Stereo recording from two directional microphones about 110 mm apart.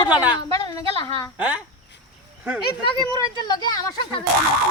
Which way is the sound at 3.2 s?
40° left (ahead or behind).